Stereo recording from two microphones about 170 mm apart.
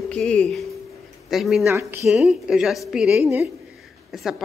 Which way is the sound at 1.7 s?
15° right (ahead or behind).